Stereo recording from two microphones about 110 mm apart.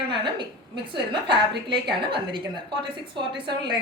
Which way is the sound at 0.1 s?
45° right (ahead or behind).